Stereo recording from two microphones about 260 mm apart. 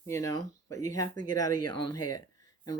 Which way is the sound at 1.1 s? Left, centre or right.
Left.